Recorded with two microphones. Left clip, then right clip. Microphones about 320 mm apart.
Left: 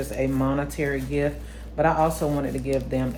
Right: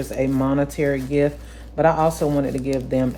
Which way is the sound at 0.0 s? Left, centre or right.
Right.